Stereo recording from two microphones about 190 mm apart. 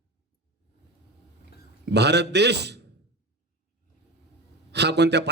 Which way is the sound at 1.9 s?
60° right (ahead or behind).